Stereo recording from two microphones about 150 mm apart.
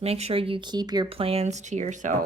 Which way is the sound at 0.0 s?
45° right (ahead or behind).